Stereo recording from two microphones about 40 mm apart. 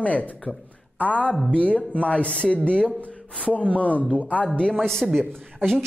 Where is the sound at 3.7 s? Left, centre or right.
Left.